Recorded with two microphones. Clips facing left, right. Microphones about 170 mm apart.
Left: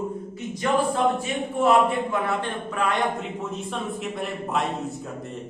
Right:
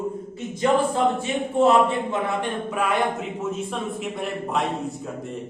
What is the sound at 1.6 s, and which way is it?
Speech, 25° right (ahead or behind).